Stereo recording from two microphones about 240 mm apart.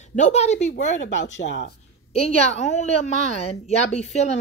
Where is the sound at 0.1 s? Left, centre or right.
Left.